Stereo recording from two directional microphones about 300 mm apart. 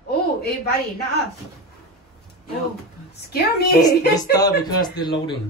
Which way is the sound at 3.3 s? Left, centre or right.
Left.